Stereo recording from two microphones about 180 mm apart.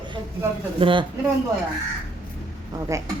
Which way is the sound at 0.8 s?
30° right (ahead or behind).